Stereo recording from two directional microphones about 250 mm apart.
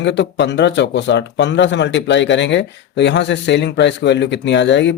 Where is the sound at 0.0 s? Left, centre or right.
Left.